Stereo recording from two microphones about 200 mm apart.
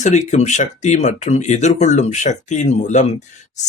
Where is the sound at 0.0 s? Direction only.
35° left (ahead or behind).